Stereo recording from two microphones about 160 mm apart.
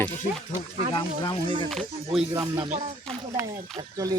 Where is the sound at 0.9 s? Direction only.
30° left (ahead or behind).